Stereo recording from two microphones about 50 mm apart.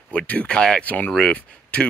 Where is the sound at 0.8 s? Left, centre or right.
Left.